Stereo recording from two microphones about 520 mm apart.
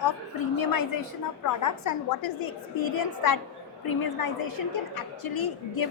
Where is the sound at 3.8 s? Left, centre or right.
Left.